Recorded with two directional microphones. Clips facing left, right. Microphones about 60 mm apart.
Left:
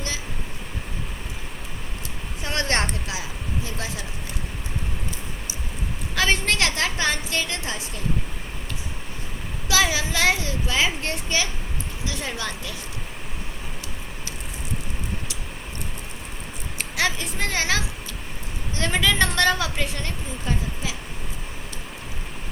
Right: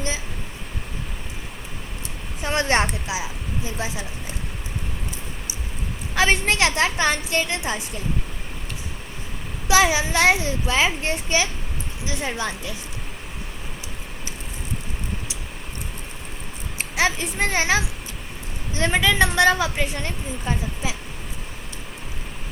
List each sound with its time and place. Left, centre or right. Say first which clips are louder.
2.4 s a woman's voice: right 4 dB; right
6.1 s a child's voice: right 3 dB; centre
9.6 s a child's voice: right 4 dB; right
16.7 s a woman's voice: right 3 dB; right